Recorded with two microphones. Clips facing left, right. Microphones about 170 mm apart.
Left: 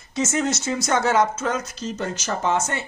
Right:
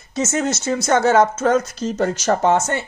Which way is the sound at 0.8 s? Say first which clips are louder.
Right 5 dB; 45° right (ahead or behind).